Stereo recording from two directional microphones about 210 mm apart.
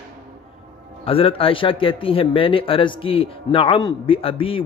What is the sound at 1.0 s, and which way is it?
Speech, 25° left (ahead or behind).